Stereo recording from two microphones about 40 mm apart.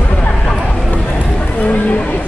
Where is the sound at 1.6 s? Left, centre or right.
Left.